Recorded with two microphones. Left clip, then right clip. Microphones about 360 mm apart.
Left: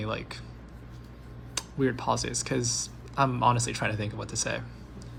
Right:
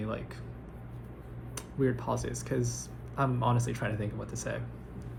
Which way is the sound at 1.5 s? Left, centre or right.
Left.